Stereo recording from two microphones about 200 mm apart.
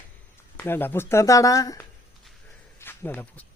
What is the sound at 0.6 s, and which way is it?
Speech, 10° left (ahead or behind).